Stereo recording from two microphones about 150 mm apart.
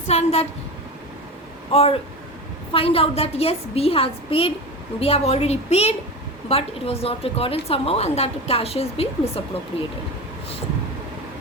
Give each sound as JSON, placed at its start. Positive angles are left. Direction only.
{"t": 0.1, "sound": "a woman's voice", "side_deg": 45}
{"t": 1.7, "sound": "a woman's voice", "side_deg": 45}